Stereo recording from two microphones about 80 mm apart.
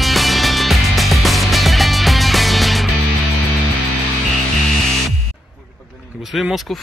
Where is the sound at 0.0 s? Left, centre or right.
Centre.